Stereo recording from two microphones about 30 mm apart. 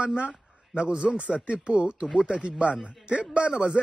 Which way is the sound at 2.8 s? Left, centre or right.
Right.